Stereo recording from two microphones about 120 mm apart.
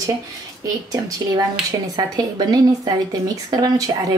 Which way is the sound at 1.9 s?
35° right (ahead or behind).